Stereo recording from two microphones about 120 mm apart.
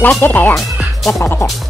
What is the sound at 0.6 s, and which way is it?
Music, centre (ahead or behind).